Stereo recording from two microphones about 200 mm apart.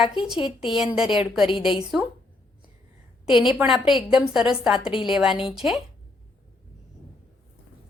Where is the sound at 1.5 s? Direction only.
25° left (ahead or behind).